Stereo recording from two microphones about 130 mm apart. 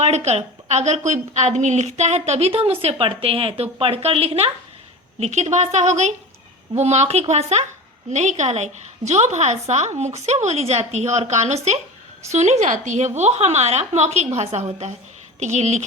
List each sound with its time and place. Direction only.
0.0 s a woman's voice: 55° right (ahead or behind)
5.2 s a woman's voice: 60° right (ahead or behind)